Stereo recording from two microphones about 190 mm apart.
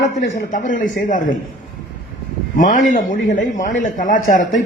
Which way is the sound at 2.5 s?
45° left (ahead or behind).